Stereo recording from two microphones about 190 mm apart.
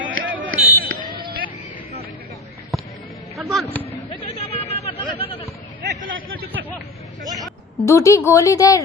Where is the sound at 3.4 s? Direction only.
Centre (ahead or behind).